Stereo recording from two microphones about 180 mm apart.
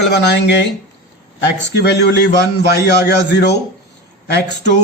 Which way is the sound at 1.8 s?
70° left (ahead or behind).